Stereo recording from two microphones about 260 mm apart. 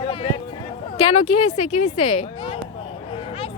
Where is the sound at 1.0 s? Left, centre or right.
Left.